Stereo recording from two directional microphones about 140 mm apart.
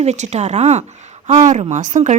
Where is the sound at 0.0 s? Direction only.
55° right (ahead or behind).